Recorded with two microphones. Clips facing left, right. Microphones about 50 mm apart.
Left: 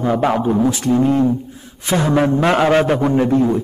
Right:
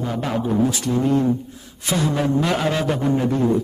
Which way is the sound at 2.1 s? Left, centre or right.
Left.